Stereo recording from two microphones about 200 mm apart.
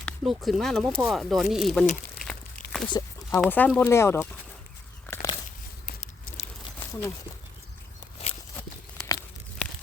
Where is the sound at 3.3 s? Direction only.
10° left (ahead or behind).